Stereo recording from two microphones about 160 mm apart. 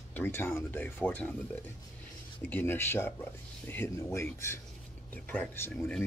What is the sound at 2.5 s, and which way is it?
Speech, 10° left (ahead or behind).